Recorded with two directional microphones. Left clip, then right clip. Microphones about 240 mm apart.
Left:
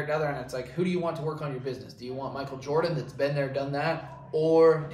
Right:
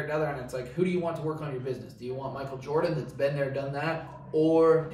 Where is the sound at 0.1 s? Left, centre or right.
Centre.